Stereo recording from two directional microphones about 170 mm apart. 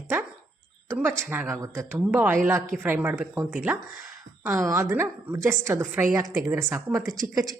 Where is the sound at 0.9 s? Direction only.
10° right (ahead or behind).